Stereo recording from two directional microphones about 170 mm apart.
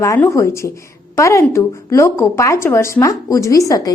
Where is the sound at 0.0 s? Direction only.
15° left (ahead or behind).